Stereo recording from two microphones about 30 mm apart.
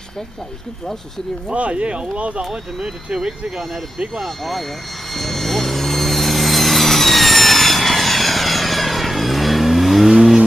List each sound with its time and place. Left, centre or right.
1.5 s speech: right
2.8 s speech: centre
4.2 s speech: centre
5.1 s vehicle: centre